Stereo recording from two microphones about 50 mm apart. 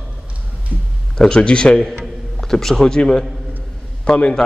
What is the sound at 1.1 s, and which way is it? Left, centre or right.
Speech, centre.